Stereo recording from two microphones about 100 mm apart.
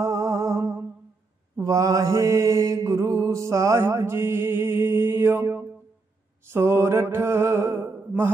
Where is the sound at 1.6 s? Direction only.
35° right (ahead or behind).